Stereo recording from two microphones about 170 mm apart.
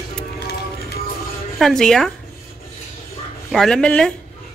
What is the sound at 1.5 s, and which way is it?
Speech, centre (ahead or behind).